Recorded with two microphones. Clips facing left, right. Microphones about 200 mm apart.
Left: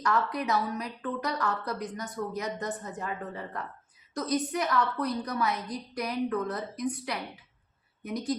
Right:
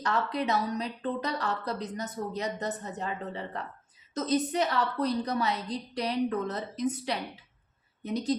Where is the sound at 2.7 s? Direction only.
40° right (ahead or behind).